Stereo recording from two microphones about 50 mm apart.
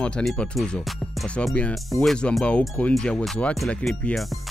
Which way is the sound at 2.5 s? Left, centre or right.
Left.